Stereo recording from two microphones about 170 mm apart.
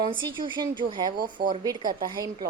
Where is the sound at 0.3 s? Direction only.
30° right (ahead or behind).